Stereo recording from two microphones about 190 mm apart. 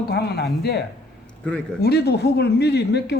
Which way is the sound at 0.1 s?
60° left (ahead or behind).